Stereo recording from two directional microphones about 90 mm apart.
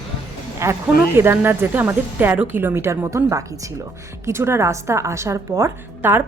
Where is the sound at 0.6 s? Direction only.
35° right (ahead or behind).